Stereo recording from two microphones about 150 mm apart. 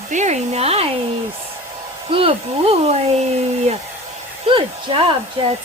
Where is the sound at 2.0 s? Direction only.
40° right (ahead or behind).